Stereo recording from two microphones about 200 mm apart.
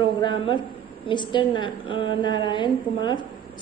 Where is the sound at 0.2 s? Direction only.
25° left (ahead or behind).